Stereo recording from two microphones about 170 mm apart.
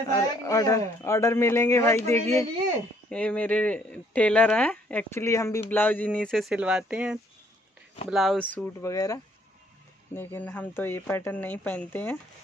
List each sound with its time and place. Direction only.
0.1 s speech: 20° left (ahead or behind)
8.9 s speech: 20° left (ahead or behind)